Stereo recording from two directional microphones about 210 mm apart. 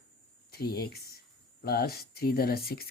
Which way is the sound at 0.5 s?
45° left (ahead or behind).